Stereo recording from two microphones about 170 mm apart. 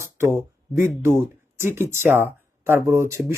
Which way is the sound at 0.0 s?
15° right (ahead or behind).